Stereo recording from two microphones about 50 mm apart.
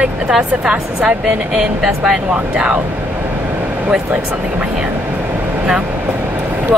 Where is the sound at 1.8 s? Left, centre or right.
Centre.